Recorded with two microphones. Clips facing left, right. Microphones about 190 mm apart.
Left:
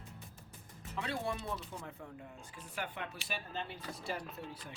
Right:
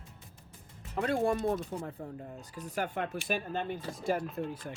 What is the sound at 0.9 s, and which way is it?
Speech, 50° right (ahead or behind).